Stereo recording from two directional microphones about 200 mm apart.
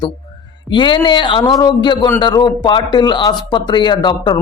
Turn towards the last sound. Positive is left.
turn(degrees=20)  # may be behind; listen again after turning